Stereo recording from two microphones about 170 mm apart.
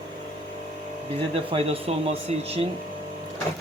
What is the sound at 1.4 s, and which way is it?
Speech, 35° right (ahead or behind).